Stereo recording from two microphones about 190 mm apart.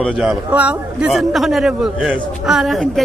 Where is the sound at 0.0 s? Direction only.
Centre (ahead or behind).